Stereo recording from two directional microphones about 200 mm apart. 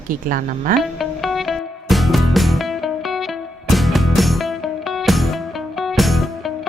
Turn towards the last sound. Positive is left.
turn(degrees=0)  # may be behind; listen again after turning